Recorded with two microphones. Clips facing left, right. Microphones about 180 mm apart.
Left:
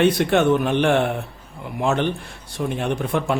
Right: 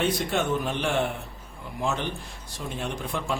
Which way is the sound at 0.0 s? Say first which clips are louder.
Left 9 dB; 70° left (ahead or behind).